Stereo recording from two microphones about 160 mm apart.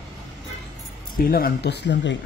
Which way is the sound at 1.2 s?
65° left (ahead or behind).